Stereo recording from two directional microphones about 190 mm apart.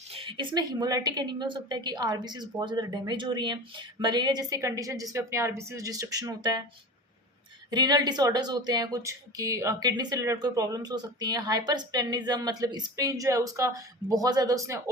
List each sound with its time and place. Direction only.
0.1 s speech: 30° right (ahead or behind)
7.7 s speech: 20° right (ahead or behind)